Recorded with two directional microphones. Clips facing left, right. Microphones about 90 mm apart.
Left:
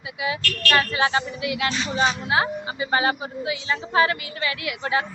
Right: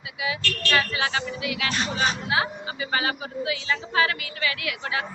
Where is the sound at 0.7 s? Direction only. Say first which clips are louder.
Left 4 dB; 35° left (ahead or behind).